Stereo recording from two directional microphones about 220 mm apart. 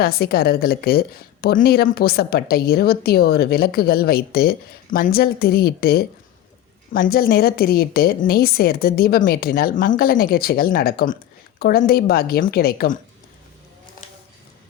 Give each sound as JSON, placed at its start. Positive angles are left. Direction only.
{"t": 0.0, "sound": "a woman's voice", "side_deg": 45}